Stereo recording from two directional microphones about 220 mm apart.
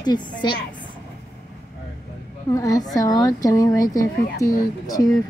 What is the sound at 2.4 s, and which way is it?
A woman's voice, 15° left (ahead or behind).